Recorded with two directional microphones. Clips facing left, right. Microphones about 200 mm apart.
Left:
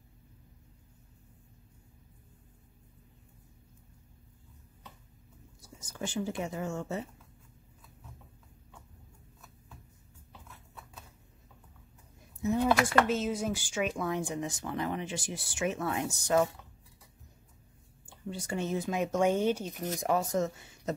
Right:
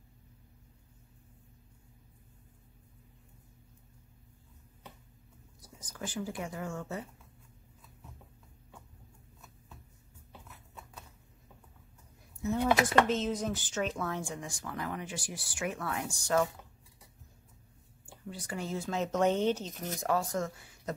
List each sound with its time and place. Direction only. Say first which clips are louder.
5.6 s speech: left 3 dB; 25° left (ahead or behind)
13.0 s speech: left 1 dB; 10° left (ahead or behind)
18.0 s speech: left 4 dB; 25° left (ahead or behind)